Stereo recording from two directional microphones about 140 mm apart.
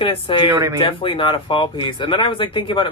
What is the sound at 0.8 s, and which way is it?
Speech, 40° left (ahead or behind).